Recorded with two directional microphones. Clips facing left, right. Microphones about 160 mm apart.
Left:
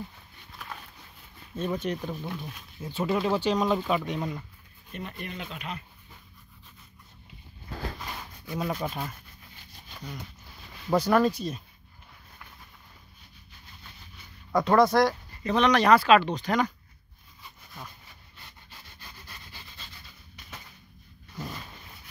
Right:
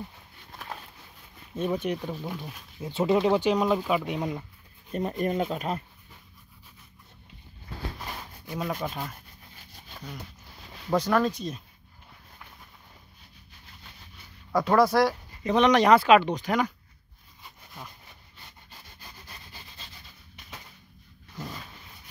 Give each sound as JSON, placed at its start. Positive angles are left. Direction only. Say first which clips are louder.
{"t": 0.5, "sound": "a sound", "louder": "right 2 dB", "side_deg": -45}
{"t": 1.5, "sound": "speech", "louder": "right 2 dB", "side_deg": -15}
{"t": 5.2, "sound": "speech", "louder": "right 11 dB", "side_deg": -40}
{"t": 8.5, "sound": "speech", "louder": "left 1 dB", "side_deg": 5}
{"t": 10.9, "sound": "speech", "louder": "left 2 dB", "side_deg": 10}
{"t": 14.5, "sound": "speech", "louder": "even", "side_deg": -5}
{"t": 15.4, "sound": "speech", "louder": "right 2 dB", "side_deg": -20}